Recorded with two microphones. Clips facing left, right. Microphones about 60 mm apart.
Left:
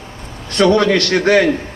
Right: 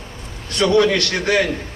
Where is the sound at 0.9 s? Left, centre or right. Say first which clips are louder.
Left 6 dB; left.